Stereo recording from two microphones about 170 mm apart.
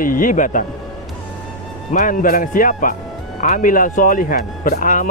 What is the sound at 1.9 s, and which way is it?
Speech, 50° left (ahead or behind).